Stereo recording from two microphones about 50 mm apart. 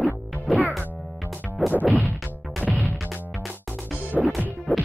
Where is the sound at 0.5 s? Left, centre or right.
Centre.